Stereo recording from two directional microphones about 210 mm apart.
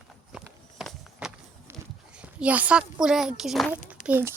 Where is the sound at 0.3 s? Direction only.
Centre (ahead or behind).